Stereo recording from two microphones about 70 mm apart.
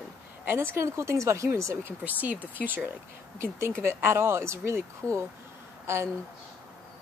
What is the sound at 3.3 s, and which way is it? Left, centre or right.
Speech, right.